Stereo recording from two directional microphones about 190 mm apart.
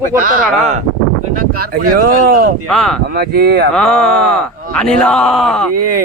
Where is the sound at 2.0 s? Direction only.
50° right (ahead or behind).